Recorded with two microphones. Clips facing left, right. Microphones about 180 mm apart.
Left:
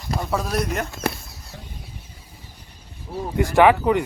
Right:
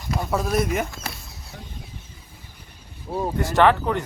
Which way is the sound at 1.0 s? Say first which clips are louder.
Left 10 dB; 60° left (ahead or behind).